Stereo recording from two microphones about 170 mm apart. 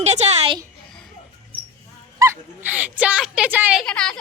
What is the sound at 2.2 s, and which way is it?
Speech, 15° right (ahead or behind).